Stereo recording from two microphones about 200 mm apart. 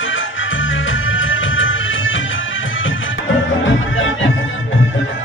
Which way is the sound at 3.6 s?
75° left (ahead or behind).